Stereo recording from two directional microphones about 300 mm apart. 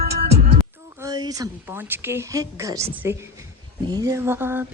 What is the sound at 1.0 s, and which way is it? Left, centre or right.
A woman's voice, centre.